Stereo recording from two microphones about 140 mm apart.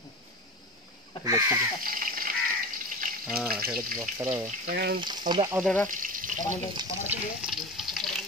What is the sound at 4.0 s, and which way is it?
Speech, 20° right (ahead or behind).